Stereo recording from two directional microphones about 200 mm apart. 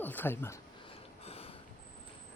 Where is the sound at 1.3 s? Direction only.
30° left (ahead or behind).